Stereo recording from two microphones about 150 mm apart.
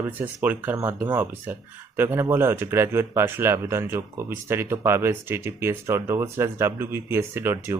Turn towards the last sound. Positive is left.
turn(degrees=-15)  # may be behind; listen again after turning